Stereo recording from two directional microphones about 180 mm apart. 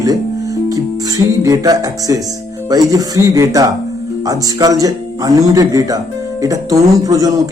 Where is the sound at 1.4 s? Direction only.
20° right (ahead or behind).